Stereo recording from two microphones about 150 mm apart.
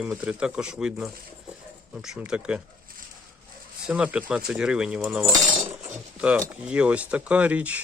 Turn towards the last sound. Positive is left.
turn(degrees=-10)  # may be behind; listen again after turning